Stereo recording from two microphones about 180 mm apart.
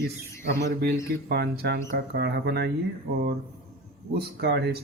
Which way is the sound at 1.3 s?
65° right (ahead or behind).